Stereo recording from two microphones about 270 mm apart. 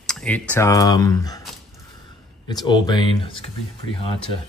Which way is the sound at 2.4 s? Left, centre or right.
Centre.